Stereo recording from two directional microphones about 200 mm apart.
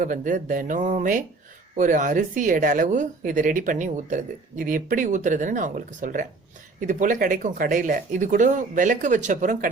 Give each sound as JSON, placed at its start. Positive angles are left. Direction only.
{"t": 0.0, "sound": "speech", "side_deg": -40}